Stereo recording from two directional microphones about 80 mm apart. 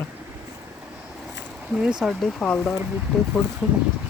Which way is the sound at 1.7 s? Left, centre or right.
Centre.